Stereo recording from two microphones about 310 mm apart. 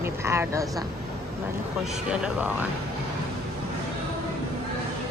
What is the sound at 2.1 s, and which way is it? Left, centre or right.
Speech, centre.